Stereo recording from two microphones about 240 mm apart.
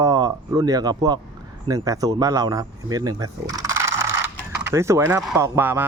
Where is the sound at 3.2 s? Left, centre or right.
Centre.